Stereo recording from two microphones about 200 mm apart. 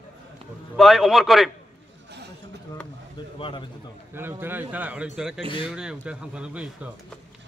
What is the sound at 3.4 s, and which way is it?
Speech, 25° left (ahead or behind).